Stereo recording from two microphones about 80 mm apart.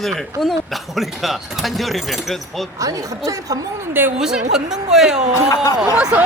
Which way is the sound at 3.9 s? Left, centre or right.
Right.